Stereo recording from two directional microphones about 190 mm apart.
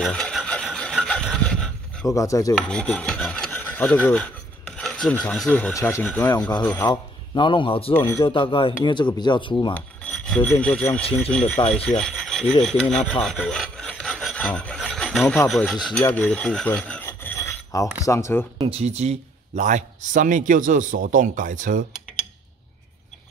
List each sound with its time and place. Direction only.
0.0 s a sound: 5° left (ahead or behind)
2.1 s speech: 15° left (ahead or behind)
2.5 s speech: 5° left (ahead or behind)
6.9 s a man's voice: 25° left (ahead or behind)
7.9 s speech: 10° left (ahead or behind)
8.2 s speech: 25° left (ahead or behind)
9.8 s speech: 5° left (ahead or behind)
11.7 s filing: 5° left (ahead or behind)
12.6 s rub: 5° left (ahead or behind)
18.0 s speech: 15° left (ahead or behind)
18.6 s speech: 30° right (ahead or behind)